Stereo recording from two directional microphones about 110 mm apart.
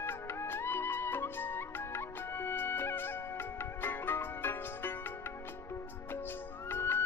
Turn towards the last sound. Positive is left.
turn(degrees=20)  # may be behind; listen again after turning